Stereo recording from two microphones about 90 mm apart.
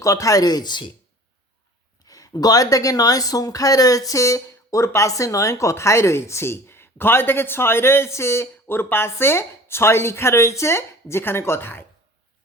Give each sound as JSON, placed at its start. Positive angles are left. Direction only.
{"t": 0.0, "sound": "speech", "side_deg": 40}
{"t": 2.0, "sound": "speech", "side_deg": 40}